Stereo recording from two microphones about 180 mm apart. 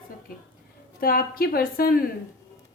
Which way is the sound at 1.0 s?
55° left (ahead or behind).